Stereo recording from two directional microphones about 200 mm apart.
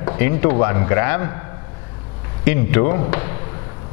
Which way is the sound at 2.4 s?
15° left (ahead or behind).